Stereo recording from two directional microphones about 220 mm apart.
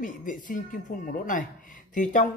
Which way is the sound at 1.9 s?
35° left (ahead or behind).